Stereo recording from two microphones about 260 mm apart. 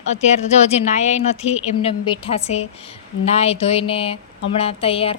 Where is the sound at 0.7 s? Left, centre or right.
Left.